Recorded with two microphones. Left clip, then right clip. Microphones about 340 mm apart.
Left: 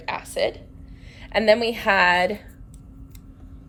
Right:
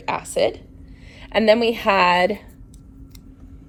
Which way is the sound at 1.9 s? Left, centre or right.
Centre.